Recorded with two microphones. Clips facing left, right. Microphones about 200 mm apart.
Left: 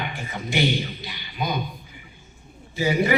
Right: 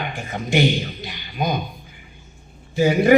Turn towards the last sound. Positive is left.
turn(degrees=-50)  # may be behind; listen again after turning